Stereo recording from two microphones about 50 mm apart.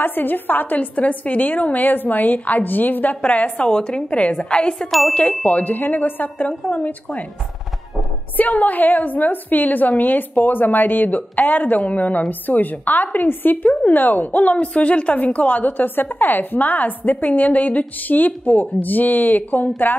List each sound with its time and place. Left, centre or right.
0.0 s a woman's voice: left; by 4.8 s centre
5.6 s a woman's voice: left
6.6 s a woman's voice: left
8.4 s a woman's voice: left